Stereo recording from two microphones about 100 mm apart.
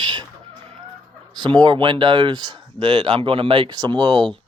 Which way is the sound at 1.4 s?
50° right (ahead or behind).